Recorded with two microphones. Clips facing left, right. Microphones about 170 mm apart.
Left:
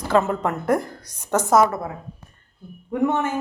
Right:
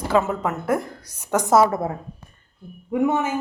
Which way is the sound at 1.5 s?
25° right (ahead or behind).